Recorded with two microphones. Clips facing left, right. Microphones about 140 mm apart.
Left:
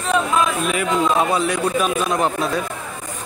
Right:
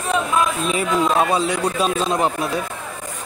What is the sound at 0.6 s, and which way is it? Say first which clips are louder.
A man's voice: even; 25° right (ahead or behind).